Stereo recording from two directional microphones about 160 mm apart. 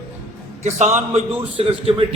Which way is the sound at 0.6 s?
45° right (ahead or behind).